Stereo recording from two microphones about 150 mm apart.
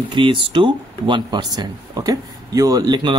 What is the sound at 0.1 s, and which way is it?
Speech, 35° right (ahead or behind).